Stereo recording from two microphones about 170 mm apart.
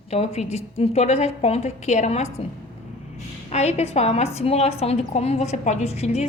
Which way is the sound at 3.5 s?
40° left (ahead or behind).